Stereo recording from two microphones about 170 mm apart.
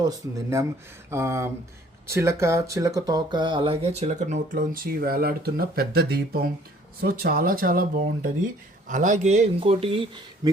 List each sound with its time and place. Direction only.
0.0 s speech: 20° right (ahead or behind)